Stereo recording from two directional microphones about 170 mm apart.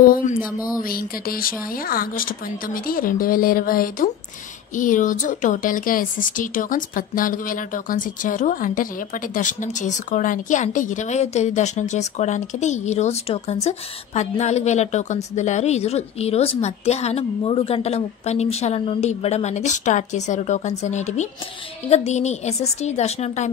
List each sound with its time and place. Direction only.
0.0 s a woman's voice: 55° left (ahead or behind)